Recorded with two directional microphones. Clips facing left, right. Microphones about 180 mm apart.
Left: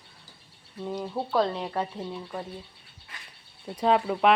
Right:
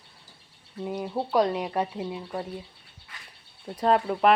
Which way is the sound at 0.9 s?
10° right (ahead or behind).